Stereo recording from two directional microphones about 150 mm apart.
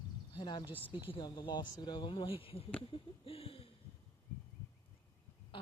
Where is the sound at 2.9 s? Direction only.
40° left (ahead or behind).